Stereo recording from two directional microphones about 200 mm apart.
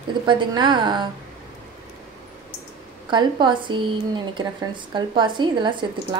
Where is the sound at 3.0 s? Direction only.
25° right (ahead or behind).